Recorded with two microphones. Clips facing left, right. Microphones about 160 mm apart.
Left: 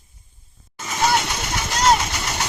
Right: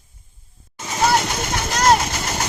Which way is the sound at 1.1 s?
45° right (ahead or behind).